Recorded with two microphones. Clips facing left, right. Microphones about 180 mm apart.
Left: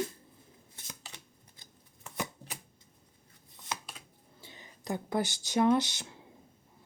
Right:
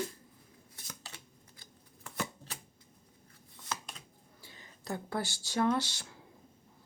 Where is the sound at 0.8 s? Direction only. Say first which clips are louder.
Even; 20° left (ahead or behind).